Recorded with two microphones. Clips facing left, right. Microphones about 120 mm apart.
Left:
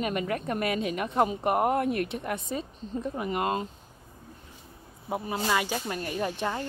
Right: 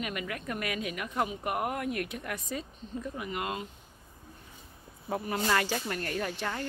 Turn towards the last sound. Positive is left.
turn(degrees=20)  # may be behind; listen again after turning